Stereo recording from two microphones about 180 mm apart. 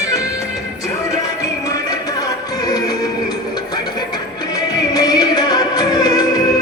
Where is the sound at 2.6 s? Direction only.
20° left (ahead or behind).